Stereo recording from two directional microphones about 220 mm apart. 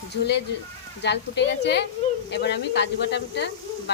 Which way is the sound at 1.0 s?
50° left (ahead or behind).